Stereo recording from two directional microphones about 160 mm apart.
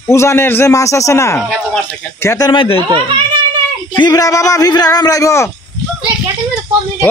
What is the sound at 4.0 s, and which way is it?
A man's voice, 20° left (ahead or behind).